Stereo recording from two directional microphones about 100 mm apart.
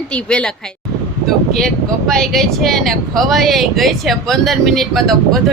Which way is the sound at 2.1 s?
5° left (ahead or behind).